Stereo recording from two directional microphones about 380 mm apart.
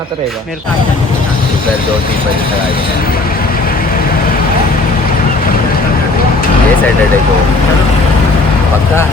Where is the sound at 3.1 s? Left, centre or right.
Left.